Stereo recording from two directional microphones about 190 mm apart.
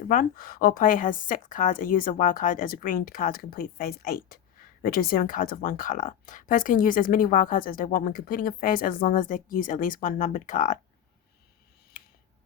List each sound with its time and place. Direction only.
0.1 s speech: 45° left (ahead or behind)